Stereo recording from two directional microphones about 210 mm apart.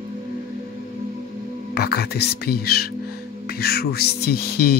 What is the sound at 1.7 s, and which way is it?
Speech, 50° left (ahead or behind).